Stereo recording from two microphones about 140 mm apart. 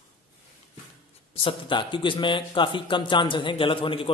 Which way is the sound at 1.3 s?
40° left (ahead or behind).